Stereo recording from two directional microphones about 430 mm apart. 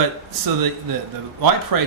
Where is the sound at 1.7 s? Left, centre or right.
Right.